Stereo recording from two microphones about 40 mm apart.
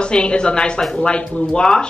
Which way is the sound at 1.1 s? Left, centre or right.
Left.